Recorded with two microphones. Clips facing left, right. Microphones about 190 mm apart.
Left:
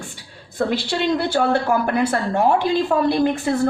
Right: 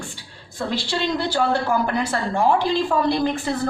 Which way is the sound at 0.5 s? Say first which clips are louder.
Left 4 dB; 60° left (ahead or behind).